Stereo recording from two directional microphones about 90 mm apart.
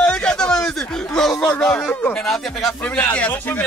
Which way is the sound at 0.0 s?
10° left (ahead or behind).